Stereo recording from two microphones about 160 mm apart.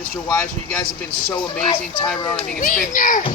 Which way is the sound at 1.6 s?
30° left (ahead or behind).